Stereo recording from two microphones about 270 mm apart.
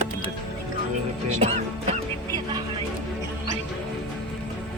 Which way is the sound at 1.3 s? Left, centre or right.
Right.